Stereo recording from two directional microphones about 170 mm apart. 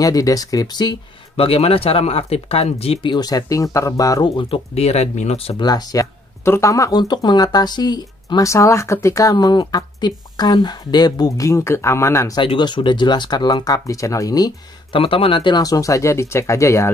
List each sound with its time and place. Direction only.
0.0 s speech: 20° left (ahead or behind); by 5.6 s 40° left (ahead or behind)
5.6 s speech: 20° left (ahead or behind)
12.4 s speech: 25° left (ahead or behind)